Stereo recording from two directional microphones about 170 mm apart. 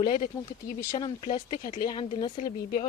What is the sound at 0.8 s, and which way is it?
Speech, 15° left (ahead or behind).